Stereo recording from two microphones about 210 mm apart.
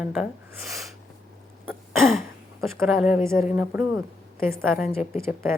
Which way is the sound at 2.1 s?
Centre (ahead or behind).